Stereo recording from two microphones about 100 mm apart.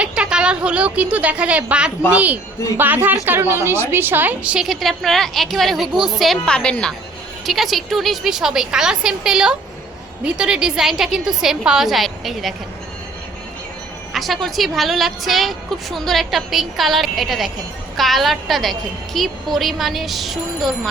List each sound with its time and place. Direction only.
0.0 s a woman's voice: 10° right (ahead or behind)
4.6 s a woman's voice: centre (ahead or behind)
7.4 s a woman's voice: centre (ahead or behind)
14.1 s a woman's voice: centre (ahead or behind)